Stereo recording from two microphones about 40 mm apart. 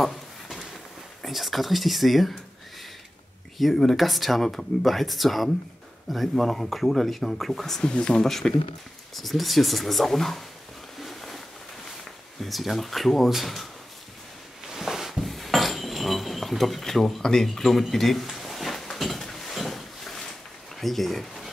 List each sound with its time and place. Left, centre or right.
0.0 s a sound: centre
1.2 s speech: centre
3.7 s speech: centre
7.8 s speech: left
8.3 s speech: centre
11.0 s a sound: centre
12.4 s speech: centre
14.7 s cutlery: centre
20.8 s speech: centre